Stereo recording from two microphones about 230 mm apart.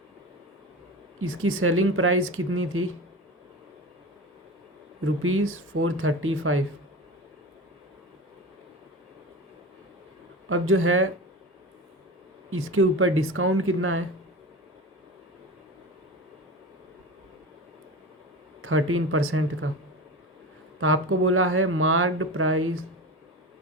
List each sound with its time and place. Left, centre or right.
1.2 s speech: right
5.0 s speech: right
10.5 s speech: right
12.5 s speech: right
18.6 s speech: right
20.8 s speech: right